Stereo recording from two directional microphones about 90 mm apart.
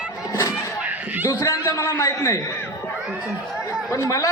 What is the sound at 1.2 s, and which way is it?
A man's voice, 35° left (ahead or behind).